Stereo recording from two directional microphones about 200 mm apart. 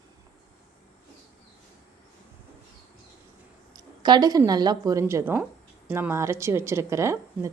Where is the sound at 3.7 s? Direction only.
20° right (ahead or behind).